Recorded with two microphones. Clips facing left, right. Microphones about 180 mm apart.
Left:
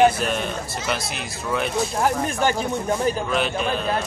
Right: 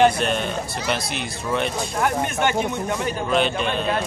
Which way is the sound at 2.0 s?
35° left (ahead or behind).